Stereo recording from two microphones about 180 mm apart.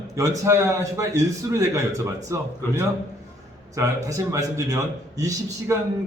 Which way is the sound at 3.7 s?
20° right (ahead or behind).